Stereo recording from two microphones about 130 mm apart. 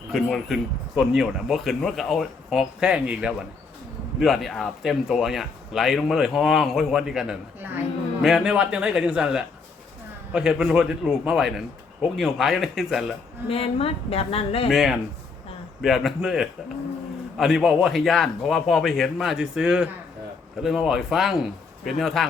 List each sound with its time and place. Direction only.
0.1 s a man's voice: centre (ahead or behind)
13.5 s speech: 45° left (ahead or behind)
14.7 s speech: centre (ahead or behind)